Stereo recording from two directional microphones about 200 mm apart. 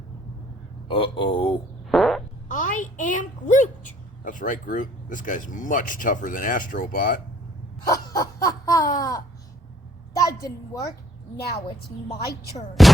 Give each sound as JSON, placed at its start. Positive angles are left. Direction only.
{"t": 0.9, "sound": "a man's voice", "side_deg": 25}
{"t": 1.9, "sound": "fart", "side_deg": 0}
{"t": 2.5, "sound": "a woman's voice", "side_deg": 40}
{"t": 7.9, "sound": "a sound", "side_deg": 15}
{"t": 9.0, "sound": "babbling", "side_deg": 20}
{"t": 10.2, "sound": "a woman's voice", "side_deg": 15}
{"t": 12.8, "sound": "music", "side_deg": 0}